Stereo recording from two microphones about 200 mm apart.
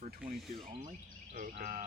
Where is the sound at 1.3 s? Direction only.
40° right (ahead or behind).